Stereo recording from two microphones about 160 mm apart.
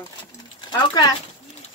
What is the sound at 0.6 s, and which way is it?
Speech, 25° left (ahead or behind).